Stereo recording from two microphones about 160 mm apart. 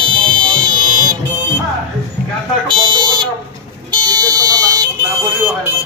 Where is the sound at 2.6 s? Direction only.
30° right (ahead or behind).